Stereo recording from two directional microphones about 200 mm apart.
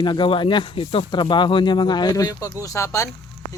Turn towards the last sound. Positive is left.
turn(degrees=15)  # may be behind; listen again after turning